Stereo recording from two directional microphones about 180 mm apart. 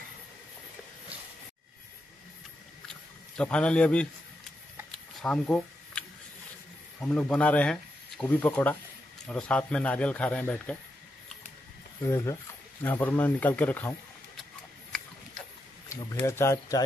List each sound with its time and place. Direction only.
2.9 s a sound: 5° left (ahead or behind)
4.9 s camera: 5° left (ahead or behind)
7.0 s speech: 5° left (ahead or behind)
12.0 s speech: 15° left (ahead or behind)
15.9 s speech: 15° left (ahead or behind)